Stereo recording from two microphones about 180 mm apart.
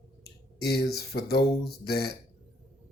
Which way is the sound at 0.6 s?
60° left (ahead or behind).